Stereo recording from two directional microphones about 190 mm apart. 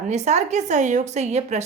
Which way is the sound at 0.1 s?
35° right (ahead or behind).